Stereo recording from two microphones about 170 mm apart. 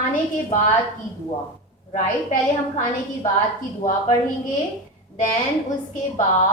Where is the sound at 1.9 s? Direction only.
45° left (ahead or behind).